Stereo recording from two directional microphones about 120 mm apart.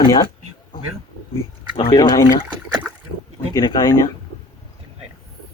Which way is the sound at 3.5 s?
30° left (ahead or behind).